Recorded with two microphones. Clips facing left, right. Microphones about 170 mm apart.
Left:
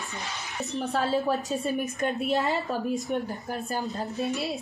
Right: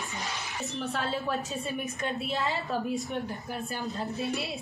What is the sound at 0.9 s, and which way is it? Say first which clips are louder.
A woman's voice: left 7 dB; 40° left (ahead or behind).